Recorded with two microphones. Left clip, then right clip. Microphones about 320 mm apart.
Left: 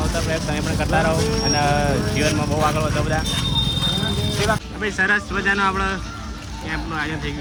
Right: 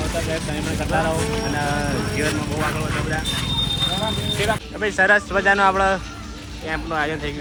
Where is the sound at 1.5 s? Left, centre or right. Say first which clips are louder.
Left 5 dB; left.